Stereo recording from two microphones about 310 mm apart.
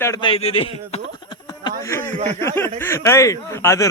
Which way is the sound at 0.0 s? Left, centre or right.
Centre.